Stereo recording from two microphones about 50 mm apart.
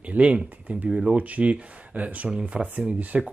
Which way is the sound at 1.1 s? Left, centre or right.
Right.